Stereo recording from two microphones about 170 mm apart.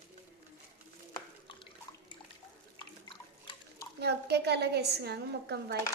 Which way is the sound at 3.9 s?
75° right (ahead or behind).